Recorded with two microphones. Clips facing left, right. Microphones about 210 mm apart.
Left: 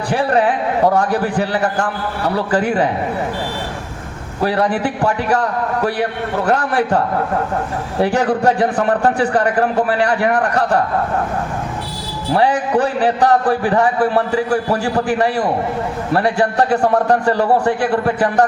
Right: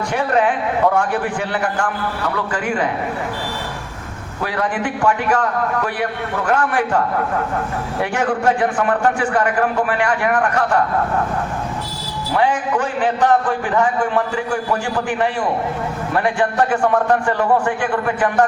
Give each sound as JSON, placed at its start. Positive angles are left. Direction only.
{"t": 0.1, "sound": "a man's voice", "side_deg": 35}
{"t": 4.4, "sound": "a man's voice", "side_deg": 35}
{"t": 12.3, "sound": "a man's voice", "side_deg": 35}